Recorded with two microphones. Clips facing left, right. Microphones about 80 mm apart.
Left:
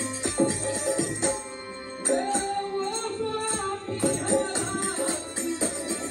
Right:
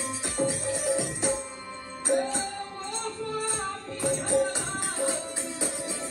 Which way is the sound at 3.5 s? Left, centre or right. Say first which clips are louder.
Left 4 dB; left.